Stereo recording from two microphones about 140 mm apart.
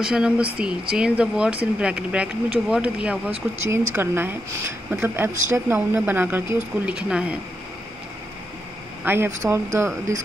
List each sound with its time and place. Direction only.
0.0 s a woman's voice: 5° right (ahead or behind)
9.0 s a woman's voice: 15° right (ahead or behind)